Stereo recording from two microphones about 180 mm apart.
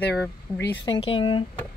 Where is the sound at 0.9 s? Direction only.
30° left (ahead or behind).